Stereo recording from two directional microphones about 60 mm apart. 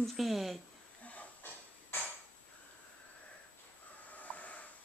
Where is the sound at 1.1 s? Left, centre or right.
Left.